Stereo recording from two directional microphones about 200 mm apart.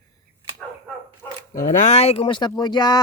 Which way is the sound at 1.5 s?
35° left (ahead or behind).